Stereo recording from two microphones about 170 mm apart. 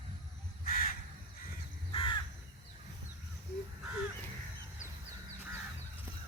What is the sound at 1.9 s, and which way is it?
Crow, 30° left (ahead or behind).